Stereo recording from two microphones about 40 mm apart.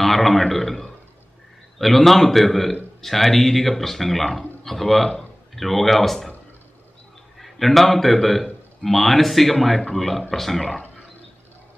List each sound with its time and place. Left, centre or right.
0.0 s a man's voice: centre
7.3 s a man's voice: centre